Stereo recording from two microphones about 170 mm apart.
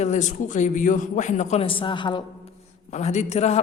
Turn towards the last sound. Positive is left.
turn(degrees=40)  # may be behind; listen again after turning